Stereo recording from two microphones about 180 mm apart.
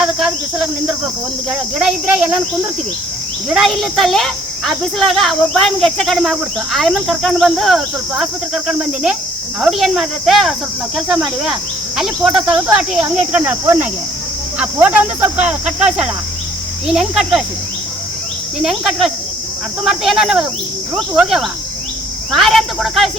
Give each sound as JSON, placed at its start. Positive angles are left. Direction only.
{"t": 0.0, "sound": "cricket", "side_deg": -5}
{"t": 1.5, "sound": "speech", "side_deg": -5}
{"t": 3.5, "sound": "speech", "side_deg": 0}
{"t": 18.6, "sound": "speech", "side_deg": 0}